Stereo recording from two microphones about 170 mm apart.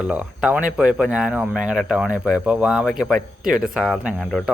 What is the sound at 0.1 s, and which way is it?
Speech, 10° right (ahead or behind).